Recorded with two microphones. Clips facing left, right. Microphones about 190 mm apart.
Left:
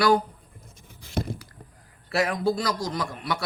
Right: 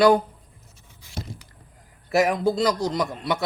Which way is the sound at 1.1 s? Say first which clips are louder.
Left 7 dB; 55° left (ahead or behind).